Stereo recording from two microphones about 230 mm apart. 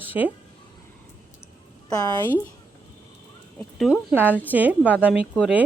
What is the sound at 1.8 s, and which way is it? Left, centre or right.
Speech, centre.